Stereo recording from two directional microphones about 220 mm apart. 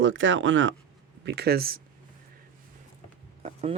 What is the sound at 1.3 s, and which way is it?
Speech, 45° right (ahead or behind).